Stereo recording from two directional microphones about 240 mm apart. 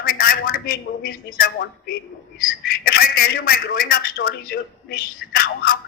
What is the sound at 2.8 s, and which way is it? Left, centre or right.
A man's voice, left.